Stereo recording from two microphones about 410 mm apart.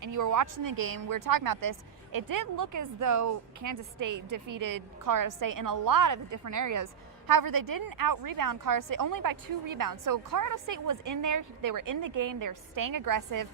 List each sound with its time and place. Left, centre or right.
0.0 s a woman's voice: right
7.3 s a woman's voice: right